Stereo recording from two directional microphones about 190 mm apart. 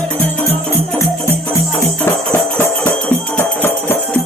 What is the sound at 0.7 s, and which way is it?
Music, 15° left (ahead or behind).